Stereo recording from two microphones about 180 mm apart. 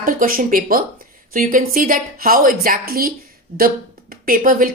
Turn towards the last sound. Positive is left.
turn(degrees=-50)  # may be behind; listen again after turning